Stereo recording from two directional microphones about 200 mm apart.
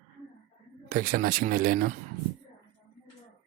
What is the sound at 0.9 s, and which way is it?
Speech, 45° right (ahead or behind).